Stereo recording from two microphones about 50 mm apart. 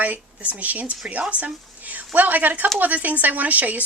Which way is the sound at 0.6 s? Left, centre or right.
Right.